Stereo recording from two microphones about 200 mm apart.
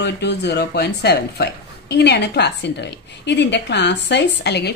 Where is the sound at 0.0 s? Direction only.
55° left (ahead or behind).